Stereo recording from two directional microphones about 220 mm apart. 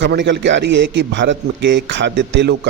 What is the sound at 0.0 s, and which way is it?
A man's voice, 55° right (ahead or behind).